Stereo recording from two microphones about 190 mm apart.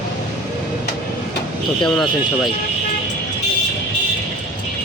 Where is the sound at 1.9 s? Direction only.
Centre (ahead or behind).